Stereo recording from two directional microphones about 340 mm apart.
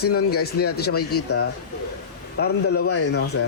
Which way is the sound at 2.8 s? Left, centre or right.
Left.